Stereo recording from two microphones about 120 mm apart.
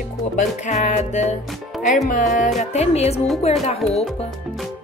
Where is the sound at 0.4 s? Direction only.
80° left.